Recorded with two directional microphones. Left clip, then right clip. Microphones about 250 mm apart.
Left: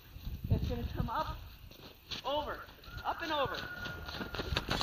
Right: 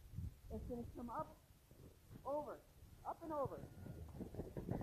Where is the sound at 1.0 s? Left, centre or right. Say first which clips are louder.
Left 12 dB; left.